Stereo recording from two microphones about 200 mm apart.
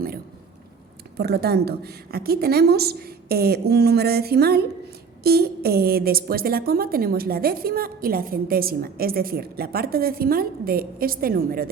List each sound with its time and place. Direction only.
1.1 s a woman's voice: 55° right (ahead or behind)